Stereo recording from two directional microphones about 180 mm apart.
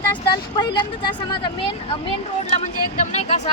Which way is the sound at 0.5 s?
25° left (ahead or behind).